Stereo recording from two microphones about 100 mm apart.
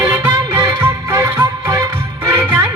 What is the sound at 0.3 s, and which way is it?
Music, 35° right (ahead or behind).